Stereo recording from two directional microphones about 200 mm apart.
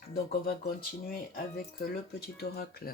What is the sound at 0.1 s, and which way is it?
Speech, 50° left (ahead or behind).